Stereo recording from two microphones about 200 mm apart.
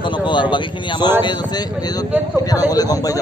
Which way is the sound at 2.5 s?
20° left (ahead or behind).